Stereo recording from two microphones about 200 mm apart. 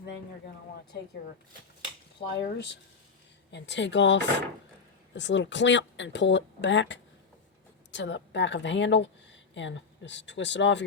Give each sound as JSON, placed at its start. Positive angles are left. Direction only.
{"t": 2.4, "sound": "speech", "side_deg": 60}